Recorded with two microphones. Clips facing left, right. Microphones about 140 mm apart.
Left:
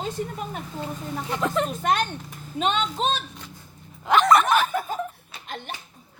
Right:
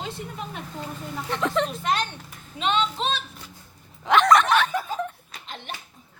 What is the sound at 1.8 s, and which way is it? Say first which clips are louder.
A woman's voice: left 2 dB; 50° left (ahead or behind).